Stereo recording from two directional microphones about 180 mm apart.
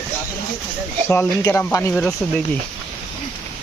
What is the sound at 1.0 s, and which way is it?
Speech, 15° left (ahead or behind).